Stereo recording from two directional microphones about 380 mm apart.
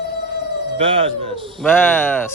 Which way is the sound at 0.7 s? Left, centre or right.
Centre.